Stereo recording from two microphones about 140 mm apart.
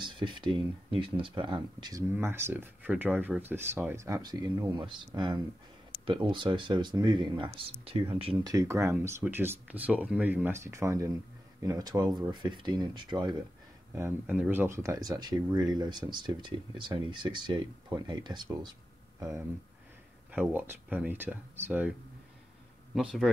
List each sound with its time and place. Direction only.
0.0 s speech: 35° right (ahead or behind)
2.1 s speech: 15° right (ahead or behind); by 8.4 s 40° right (ahead or behind)
8.5 s speech: 25° right (ahead or behind)
13.9 s speech: 15° right (ahead or behind); by 19.2 s 30° right (ahead or behind)
20.2 s speech: 15° right (ahead or behind)
22.9 s speech: centre (ahead or behind)